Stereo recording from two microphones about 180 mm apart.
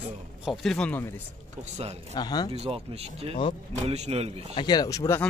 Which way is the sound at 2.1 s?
20° left (ahead or behind).